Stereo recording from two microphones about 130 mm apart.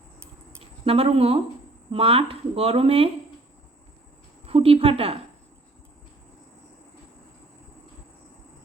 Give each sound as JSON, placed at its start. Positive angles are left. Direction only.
{"t": 0.9, "sound": "speech", "side_deg": -45}
{"t": 4.4, "sound": "a woman's voice", "side_deg": -50}